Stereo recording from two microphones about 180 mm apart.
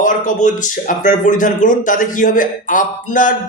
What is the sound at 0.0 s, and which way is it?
Speech, 45° left (ahead or behind).